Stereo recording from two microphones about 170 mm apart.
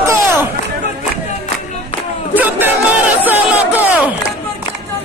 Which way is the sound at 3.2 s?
10° right (ahead or behind).